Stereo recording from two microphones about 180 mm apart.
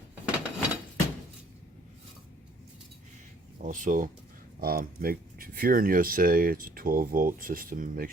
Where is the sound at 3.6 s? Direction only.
45° right (ahead or behind).